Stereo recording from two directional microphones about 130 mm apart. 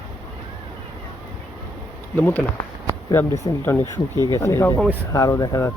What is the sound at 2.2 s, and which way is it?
Speech, 15° left (ahead or behind).